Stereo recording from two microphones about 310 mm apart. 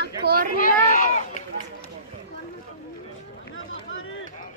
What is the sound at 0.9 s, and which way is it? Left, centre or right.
Run, left.